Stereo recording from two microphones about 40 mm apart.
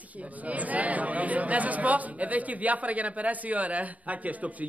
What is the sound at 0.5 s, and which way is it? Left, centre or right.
A man's voice, right.